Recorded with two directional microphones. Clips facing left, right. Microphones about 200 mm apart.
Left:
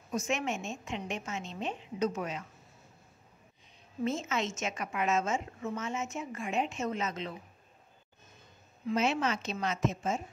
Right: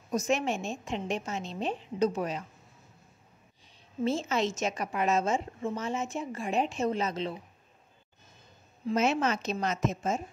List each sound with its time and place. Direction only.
0.1 s a woman's voice: 35° right (ahead or behind)
4.0 s a woman's voice: 30° right (ahead or behind)
8.8 s a woman's voice: 45° right (ahead or behind)